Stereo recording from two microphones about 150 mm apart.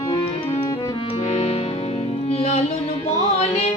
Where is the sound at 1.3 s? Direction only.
45° left (ahead or behind).